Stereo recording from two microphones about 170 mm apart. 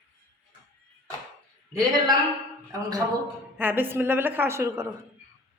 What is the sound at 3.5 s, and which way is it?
A woman's voice, 10° right (ahead or behind).